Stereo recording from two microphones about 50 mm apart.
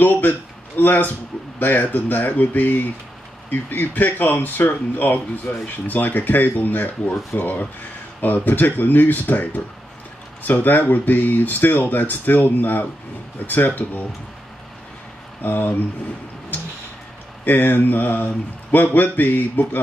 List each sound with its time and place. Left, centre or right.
0.0 s speech: left
15.4 s speech: left
16.5 s tick-tock: left
17.5 s speech: left